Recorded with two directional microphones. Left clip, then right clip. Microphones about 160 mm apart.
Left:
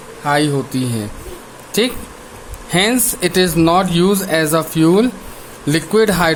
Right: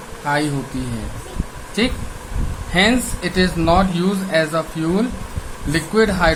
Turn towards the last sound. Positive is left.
turn(degrees=75)  # may be behind; listen again after turning